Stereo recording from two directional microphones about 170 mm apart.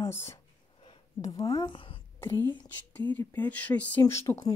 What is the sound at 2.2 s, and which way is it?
Speech, 15° left (ahead or behind).